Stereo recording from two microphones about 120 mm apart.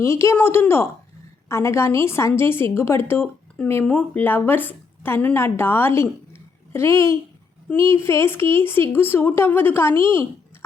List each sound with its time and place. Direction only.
0.0 s a woman's voice: 25° left (ahead or behind)